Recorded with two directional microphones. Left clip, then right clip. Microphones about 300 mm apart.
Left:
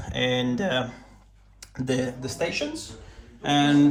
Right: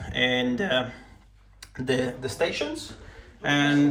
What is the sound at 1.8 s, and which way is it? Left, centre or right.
Speech, centre.